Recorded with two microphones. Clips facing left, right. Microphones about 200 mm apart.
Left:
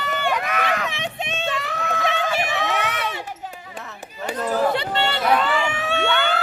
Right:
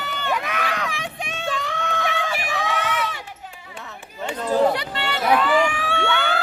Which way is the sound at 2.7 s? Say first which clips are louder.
Even; 65° left (ahead or behind).